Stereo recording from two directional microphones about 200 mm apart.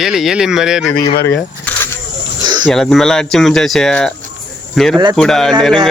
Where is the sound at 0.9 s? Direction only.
50° left (ahead or behind).